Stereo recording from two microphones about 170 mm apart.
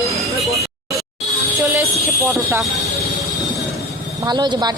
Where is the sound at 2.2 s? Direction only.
15° right (ahead or behind).